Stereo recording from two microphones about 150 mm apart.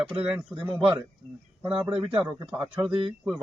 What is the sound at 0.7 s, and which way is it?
Speech, 5° right (ahead or behind).